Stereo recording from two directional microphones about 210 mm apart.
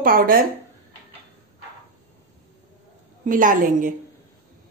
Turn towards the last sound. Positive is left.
turn(degrees=-40)  # may be behind; listen again after turning